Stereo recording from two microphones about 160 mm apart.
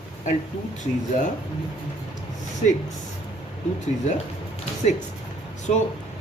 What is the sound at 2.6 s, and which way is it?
Speech, 50° left (ahead or behind).